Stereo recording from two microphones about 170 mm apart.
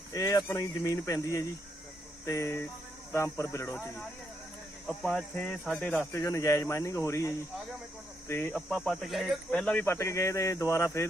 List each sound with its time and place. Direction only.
0.1 s speech: 20° left (ahead or behind)
4.9 s speech: centre (ahead or behind)
6.1 s speech: 15° left (ahead or behind)